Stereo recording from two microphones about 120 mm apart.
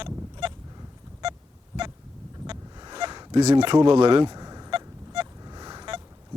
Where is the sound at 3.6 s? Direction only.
40° right (ahead or behind).